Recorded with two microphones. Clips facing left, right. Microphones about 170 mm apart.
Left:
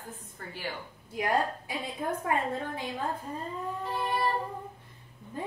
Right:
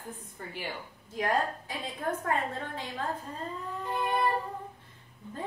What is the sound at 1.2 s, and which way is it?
A woman's voice, 10° left (ahead or behind).